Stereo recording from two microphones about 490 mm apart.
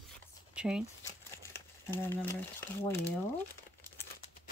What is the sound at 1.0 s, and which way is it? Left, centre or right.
Crumpling, centre.